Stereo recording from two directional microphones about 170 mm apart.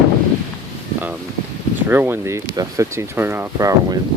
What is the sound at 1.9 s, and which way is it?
Speech, 15° right (ahead or behind).